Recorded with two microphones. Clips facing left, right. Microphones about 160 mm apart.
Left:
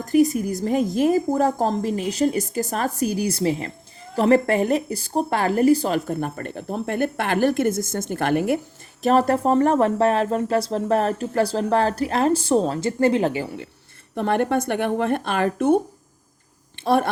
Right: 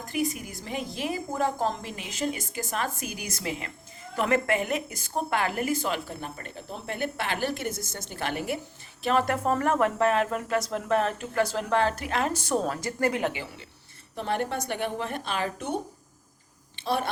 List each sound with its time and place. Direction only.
0.0 s speech: 40° left (ahead or behind)
6.1 s a woman's voice: 50° left (ahead or behind)
9.0 s speech: 35° left (ahead or behind)
13.3 s a woman's voice: 45° left (ahead or behind)
14.2 s speech: 55° left (ahead or behind)
16.7 s a sound: 55° left (ahead or behind)